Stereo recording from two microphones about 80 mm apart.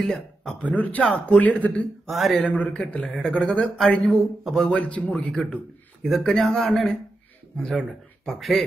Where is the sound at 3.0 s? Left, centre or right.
Centre.